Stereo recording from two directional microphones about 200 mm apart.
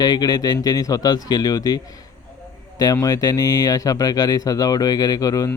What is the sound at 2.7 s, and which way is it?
Speech, 20° left (ahead or behind).